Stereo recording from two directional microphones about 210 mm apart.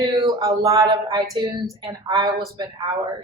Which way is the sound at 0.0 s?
20° right (ahead or behind).